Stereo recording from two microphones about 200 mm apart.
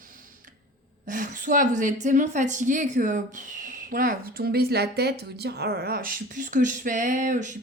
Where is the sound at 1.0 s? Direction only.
40° right (ahead or behind).